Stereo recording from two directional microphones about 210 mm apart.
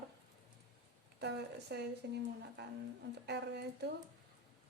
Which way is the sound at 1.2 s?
55° right (ahead or behind).